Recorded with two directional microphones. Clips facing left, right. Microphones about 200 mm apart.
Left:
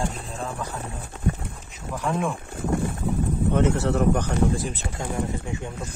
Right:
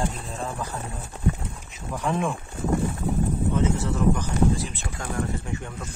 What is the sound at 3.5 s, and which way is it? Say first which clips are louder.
Speech: left 5 dB; 65° left (ahead or behind).